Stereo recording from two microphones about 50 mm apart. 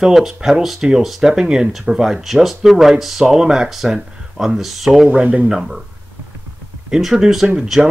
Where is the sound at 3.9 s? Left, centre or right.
Centre.